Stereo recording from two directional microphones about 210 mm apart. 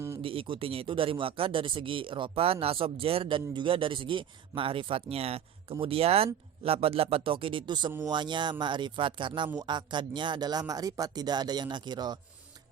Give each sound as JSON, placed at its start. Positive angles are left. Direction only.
{"t": 0.2, "sound": "speech", "side_deg": -25}